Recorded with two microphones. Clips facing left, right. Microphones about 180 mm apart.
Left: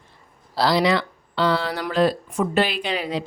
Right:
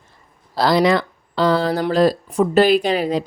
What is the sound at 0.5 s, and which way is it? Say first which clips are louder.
Speech: right 4 dB; 50° right (ahead or behind).